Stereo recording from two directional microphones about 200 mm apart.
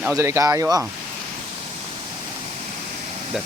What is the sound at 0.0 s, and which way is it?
Speech, 10° right (ahead or behind).